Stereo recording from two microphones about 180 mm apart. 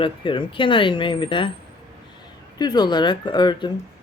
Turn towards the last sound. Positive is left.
turn(degrees=25)  # may be behind; listen again after turning